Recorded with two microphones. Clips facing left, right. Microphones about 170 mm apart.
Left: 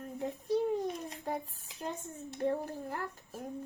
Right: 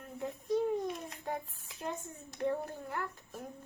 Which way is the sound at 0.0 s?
35° left (ahead or behind).